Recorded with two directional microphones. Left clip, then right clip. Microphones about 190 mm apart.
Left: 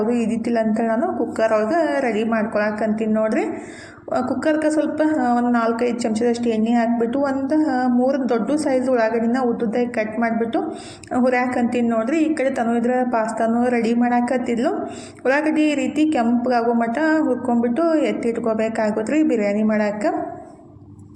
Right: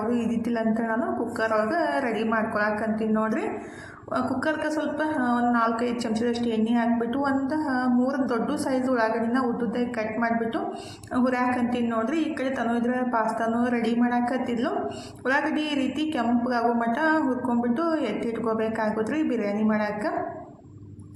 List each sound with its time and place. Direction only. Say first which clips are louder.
0.2 s a woman's voice: left 6 dB; 20° left (ahead or behind)
15.3 s a woman's voice: left 7 dB; 20° left (ahead or behind)